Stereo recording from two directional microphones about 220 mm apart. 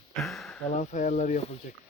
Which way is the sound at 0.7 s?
35° left (ahead or behind).